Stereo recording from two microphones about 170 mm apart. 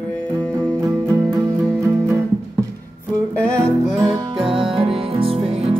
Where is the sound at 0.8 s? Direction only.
20° right (ahead or behind).